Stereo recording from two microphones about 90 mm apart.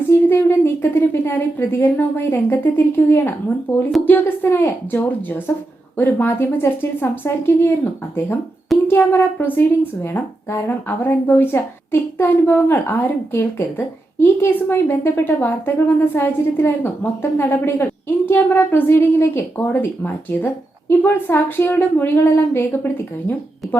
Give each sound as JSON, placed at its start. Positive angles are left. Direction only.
{"t": 0.3, "sound": "a woman's voice", "side_deg": 25}
{"t": 8.9, "sound": "a woman's voice", "side_deg": 25}